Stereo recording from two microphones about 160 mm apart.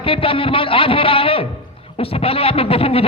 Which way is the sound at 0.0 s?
35° left (ahead or behind).